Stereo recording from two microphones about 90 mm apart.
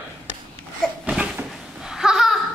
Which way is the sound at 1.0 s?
10° right (ahead or behind).